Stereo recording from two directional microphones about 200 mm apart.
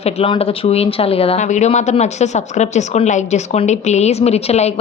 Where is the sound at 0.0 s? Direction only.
30° left (ahead or behind).